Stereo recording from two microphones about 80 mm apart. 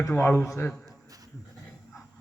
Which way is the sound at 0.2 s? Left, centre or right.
Left.